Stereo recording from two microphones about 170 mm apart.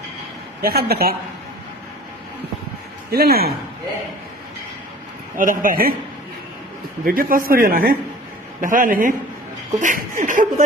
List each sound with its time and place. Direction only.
0.6 s a man's voice: 65° right (ahead or behind)
3.1 s a man's voice: 65° right (ahead or behind)
5.4 s speech: 55° right (ahead or behind)
7.0 s a man's voice: 60° right (ahead or behind)